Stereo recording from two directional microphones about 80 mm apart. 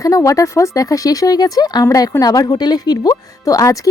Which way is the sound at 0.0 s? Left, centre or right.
Left.